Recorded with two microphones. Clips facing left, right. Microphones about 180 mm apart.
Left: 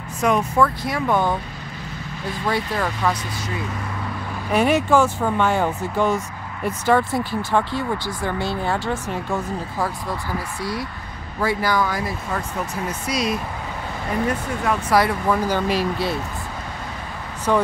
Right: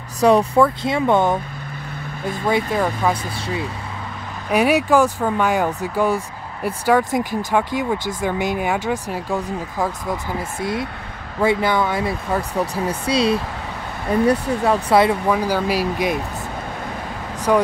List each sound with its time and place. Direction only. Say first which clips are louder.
0.2 s speech: right 5 dB; 35° right (ahead or behind)
2.4 s speech: right 4 dB; 20° right (ahead or behind)
4.5 s speech: right 2 dB; 10° right (ahead or behind)
15.3 s speech: right 1 dB; 5° right (ahead or behind)
17.5 s speech: right 3 dB; 10° right (ahead or behind)